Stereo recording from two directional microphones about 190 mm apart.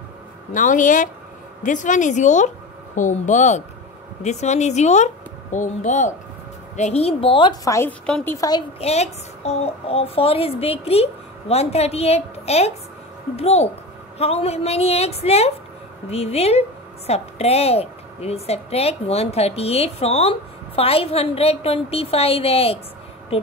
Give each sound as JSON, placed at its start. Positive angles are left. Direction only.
{"t": 0.5, "sound": "a woman's voice", "side_deg": 45}
{"t": 8.8, "sound": "a woman's voice", "side_deg": 35}